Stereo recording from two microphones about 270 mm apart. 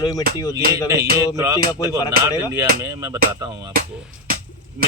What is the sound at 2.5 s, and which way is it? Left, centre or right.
Speech, centre.